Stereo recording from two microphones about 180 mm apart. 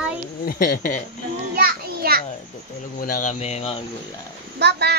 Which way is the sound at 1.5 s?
55° right (ahead or behind).